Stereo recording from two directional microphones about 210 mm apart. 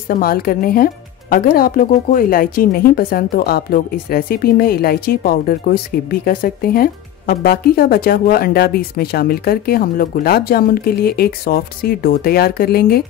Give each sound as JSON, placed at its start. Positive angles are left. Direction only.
{"t": 0.1, "sound": "speech", "side_deg": 45}